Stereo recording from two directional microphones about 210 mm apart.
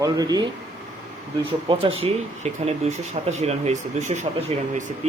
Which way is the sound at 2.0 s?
30° right (ahead or behind).